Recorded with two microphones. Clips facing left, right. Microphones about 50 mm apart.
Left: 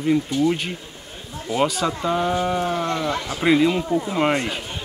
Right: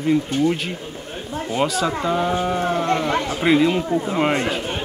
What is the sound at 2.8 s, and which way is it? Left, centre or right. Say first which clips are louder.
Speech: right 4 dB; right.